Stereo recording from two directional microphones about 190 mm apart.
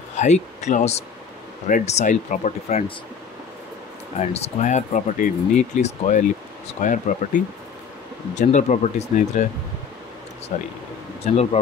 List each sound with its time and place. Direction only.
0.1 s a man's voice: 35° left (ahead or behind)
4.2 s speech: 35° left (ahead or behind)
10.5 s speech: 45° left (ahead or behind)
11.2 s speech: 35° left (ahead or behind)